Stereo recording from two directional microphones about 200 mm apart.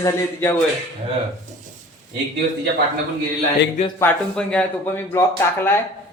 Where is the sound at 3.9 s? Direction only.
5° left (ahead or behind).